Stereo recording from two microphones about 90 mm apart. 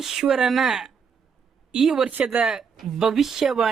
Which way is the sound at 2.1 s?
15° right (ahead or behind).